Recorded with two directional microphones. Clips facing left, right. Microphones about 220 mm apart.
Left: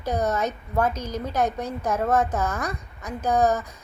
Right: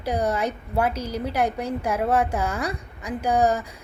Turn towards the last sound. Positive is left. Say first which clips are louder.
# even
turn(degrees=-10)  # may be behind; listen again after turning